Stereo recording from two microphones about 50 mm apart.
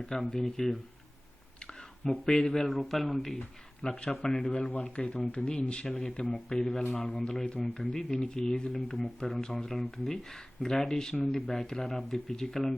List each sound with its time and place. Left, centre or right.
0.2 s speech: centre
1.6 s speech: centre
3.8 s speech: centre
5.9 s speech: centre